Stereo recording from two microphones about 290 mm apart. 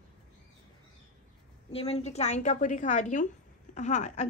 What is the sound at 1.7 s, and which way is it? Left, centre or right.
A woman's voice, left.